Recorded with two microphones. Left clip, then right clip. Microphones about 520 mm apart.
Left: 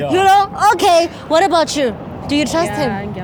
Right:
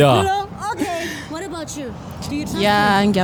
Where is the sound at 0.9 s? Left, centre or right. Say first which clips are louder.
Left 13 dB; left.